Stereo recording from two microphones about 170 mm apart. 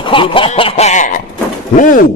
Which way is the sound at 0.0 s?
30° left (ahead or behind).